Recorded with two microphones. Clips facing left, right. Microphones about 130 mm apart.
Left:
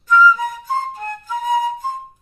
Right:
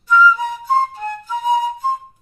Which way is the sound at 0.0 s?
45° left (ahead or behind).